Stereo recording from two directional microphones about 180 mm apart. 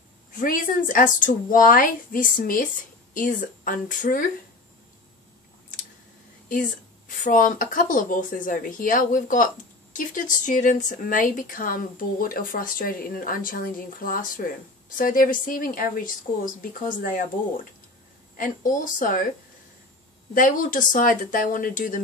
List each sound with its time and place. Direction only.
0.4 s speech: 50° left (ahead or behind)
7.2 s speech: 50° left (ahead or behind)
18.3 s speech: 50° left (ahead or behind)
20.3 s speech: 50° left (ahead or behind)